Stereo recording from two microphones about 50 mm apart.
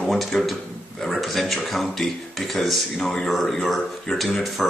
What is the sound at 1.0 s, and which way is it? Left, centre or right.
Speech, centre.